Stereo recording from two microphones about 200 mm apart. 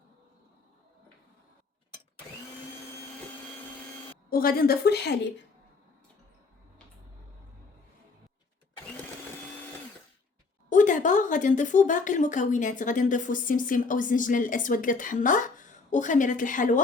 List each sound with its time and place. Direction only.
4.3 s a woman's voice: 45° left (ahead or behind)
10.7 s speech: 40° left (ahead or behind)